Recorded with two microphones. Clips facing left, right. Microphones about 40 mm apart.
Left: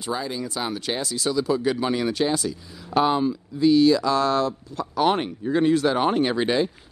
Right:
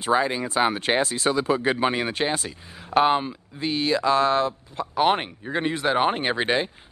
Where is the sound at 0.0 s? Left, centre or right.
Right.